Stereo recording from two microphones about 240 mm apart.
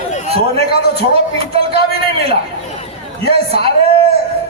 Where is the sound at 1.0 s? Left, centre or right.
Right.